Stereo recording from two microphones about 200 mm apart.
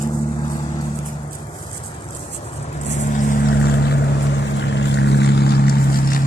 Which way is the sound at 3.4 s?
50° left (ahead or behind).